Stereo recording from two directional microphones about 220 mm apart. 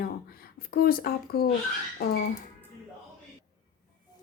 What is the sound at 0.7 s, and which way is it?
Speech, 40° left (ahead or behind).